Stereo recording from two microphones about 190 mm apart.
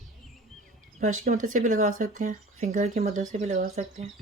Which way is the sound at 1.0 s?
40° right (ahead or behind).